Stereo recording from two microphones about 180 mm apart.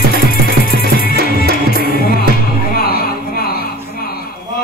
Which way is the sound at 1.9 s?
55° left (ahead or behind).